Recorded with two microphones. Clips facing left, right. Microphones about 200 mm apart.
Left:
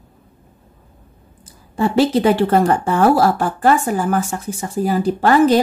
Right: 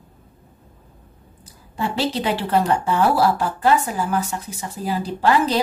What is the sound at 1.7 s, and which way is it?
Speech, 50° left (ahead or behind).